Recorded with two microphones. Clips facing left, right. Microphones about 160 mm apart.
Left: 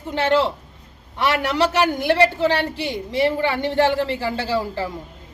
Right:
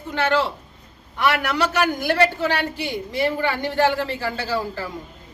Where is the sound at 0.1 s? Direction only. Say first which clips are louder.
Left 2 dB; 25° left (ahead or behind).